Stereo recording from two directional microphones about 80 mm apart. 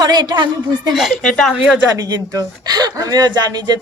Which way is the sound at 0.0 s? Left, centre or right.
Right.